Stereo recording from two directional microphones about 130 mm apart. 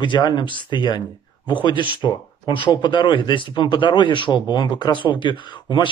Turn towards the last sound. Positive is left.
turn(degrees=35)  # may be behind; listen again after turning